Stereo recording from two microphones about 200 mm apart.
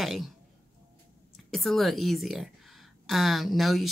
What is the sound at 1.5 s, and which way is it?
Speech, centre (ahead or behind).